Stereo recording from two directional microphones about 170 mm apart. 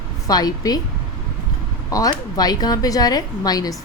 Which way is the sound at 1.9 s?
20° left (ahead or behind).